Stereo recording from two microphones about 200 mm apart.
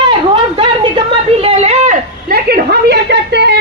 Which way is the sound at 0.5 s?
25° right (ahead or behind).